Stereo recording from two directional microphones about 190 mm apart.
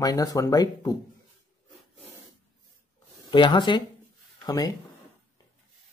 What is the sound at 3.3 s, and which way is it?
Speech, 25° left (ahead or behind).